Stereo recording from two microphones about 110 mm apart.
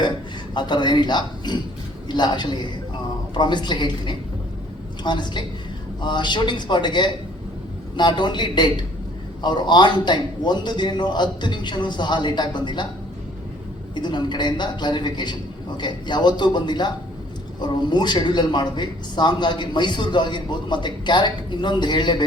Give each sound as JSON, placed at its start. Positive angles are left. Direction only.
{"t": 0.5, "sound": "a man's voice", "side_deg": 40}
{"t": 13.9, "sound": "speech", "side_deg": 45}